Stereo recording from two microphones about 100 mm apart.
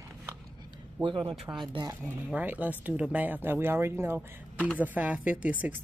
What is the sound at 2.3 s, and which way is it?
Speech, 15° right (ahead or behind).